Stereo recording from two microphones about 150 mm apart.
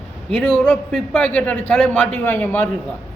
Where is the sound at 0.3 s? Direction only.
5° left (ahead or behind).